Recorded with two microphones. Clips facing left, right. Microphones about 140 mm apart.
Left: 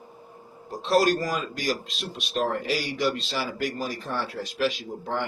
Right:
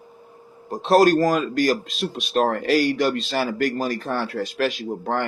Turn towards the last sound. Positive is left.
turn(degrees=-60)  # may be behind; listen again after turning